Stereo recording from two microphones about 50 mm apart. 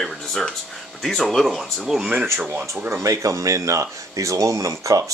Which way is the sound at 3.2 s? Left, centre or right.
Right.